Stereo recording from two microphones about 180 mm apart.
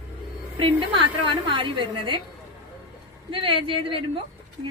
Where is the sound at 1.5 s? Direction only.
25° right (ahead or behind).